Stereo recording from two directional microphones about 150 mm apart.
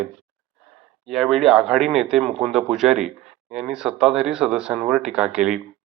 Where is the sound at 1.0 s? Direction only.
Centre (ahead or behind).